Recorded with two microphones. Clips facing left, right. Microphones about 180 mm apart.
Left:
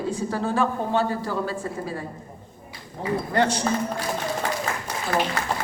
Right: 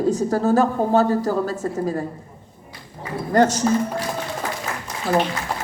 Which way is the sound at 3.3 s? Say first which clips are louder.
Right 7 dB; 40° right (ahead or behind).